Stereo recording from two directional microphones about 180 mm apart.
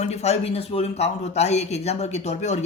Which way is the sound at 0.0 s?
35° left (ahead or behind).